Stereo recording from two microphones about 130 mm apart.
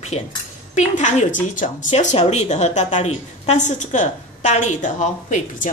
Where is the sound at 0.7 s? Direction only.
70° left (ahead or behind).